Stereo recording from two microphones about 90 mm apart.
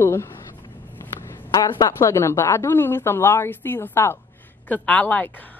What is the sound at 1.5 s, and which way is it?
A woman's voice, 40° left (ahead or behind).